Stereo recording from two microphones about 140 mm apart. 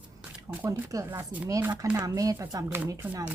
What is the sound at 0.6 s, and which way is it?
Speech, 25° right (ahead or behind).